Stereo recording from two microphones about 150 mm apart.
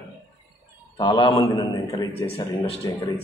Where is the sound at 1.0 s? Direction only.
30° left (ahead or behind).